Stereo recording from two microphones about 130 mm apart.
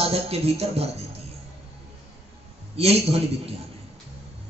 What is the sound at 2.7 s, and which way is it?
Speech, 50° right (ahead or behind).